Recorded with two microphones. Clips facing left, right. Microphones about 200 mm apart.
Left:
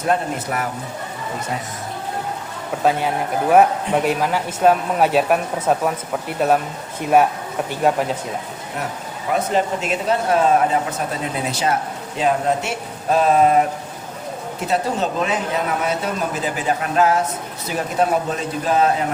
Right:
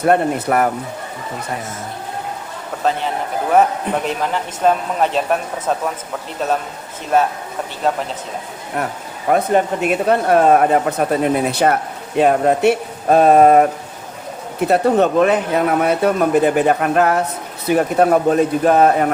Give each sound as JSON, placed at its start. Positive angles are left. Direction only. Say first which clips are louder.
{"t": 0.0, "sound": "speech", "louder": "right 6 dB", "side_deg": -60}
{"t": 3.5, "sound": "speech", "louder": "left 1 dB", "side_deg": 10}
{"t": 9.3, "sound": "speech", "louder": "right 4 dB", "side_deg": -55}
{"t": 14.7, "sound": "speech", "louder": "right 7 dB", "side_deg": -60}